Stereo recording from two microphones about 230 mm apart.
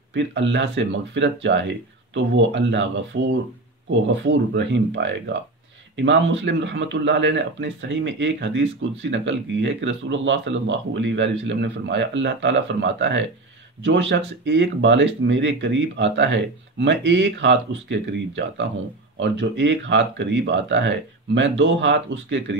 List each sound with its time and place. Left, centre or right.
0.1 s speech: right